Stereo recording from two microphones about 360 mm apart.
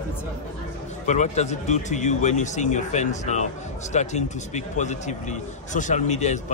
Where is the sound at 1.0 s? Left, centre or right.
Centre.